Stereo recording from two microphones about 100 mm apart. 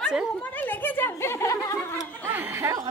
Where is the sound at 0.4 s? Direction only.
20° left (ahead or behind).